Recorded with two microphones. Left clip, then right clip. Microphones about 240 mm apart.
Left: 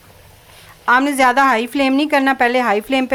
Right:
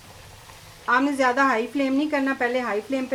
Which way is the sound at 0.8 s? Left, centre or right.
Left.